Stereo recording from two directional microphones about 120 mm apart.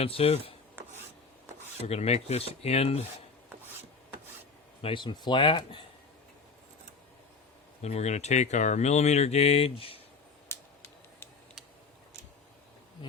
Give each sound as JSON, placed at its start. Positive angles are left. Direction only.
{"t": 0.0, "sound": "speech", "side_deg": 55}
{"t": 1.9, "sound": "speech", "side_deg": 60}
{"t": 4.8, "sound": "speech", "side_deg": 45}
{"t": 7.8, "sound": "speech", "side_deg": 70}
{"t": 10.5, "sound": "a sound", "side_deg": 20}
{"t": 13.0, "sound": "insect", "side_deg": 45}